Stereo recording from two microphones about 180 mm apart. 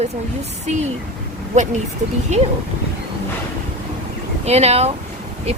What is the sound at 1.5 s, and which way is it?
Speech, 40° right (ahead or behind).